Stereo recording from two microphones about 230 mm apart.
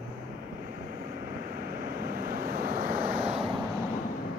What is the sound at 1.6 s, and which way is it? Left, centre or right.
Vehicle, right.